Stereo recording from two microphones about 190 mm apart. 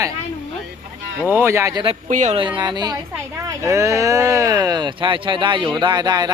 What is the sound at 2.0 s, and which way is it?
Speech, 40° right (ahead or behind).